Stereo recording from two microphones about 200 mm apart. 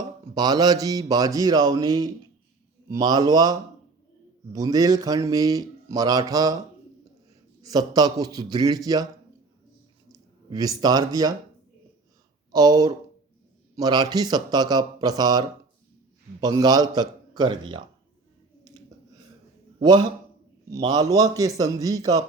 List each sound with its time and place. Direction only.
0.3 s speech: 20° right (ahead or behind)
7.6 s speech: 20° right (ahead or behind)
10.1 s speech: 20° right (ahead or behind)
12.5 s speech: 20° right (ahead or behind)
19.8 s speech: 20° right (ahead or behind)